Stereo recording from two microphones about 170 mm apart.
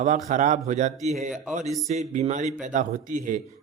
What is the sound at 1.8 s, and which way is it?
Speech, 40° right (ahead or behind).